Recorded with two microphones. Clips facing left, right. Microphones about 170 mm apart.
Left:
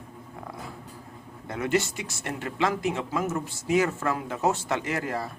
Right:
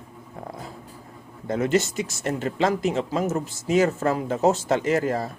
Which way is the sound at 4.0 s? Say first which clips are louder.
Right 6 dB; 40° right (ahead or behind).